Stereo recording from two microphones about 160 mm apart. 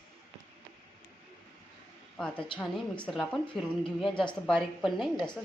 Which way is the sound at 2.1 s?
5° left (ahead or behind).